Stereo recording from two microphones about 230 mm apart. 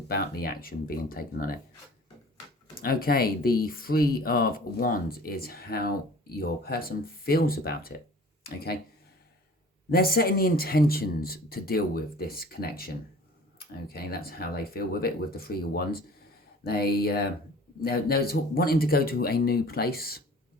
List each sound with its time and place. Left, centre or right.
0.1 s speech: left
2.7 s speech: left
9.9 s speech: left